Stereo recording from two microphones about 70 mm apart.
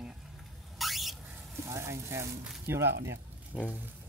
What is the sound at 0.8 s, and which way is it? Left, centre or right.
Car alarm, centre.